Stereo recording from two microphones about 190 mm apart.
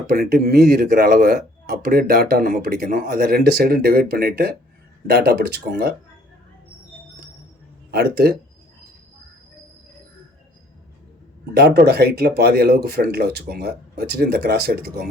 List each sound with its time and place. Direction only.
0.1 s speech: 50° right (ahead or behind)
7.9 s speech: 55° right (ahead or behind)
11.5 s speech: 55° right (ahead or behind)